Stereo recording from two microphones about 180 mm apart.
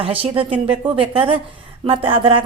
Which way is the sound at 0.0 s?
30° right (ahead or behind).